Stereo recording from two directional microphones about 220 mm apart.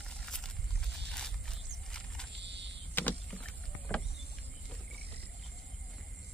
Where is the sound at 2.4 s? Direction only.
50° right (ahead or behind).